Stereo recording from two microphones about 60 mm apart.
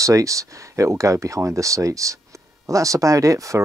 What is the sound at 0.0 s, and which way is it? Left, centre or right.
Speech, right.